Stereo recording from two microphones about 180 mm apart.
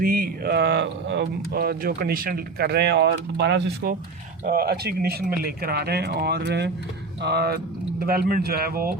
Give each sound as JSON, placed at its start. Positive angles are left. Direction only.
{"t": 0.0, "sound": "speech", "side_deg": -55}